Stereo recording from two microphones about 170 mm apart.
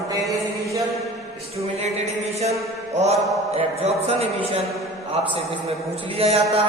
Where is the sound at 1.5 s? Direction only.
40° right (ahead or behind).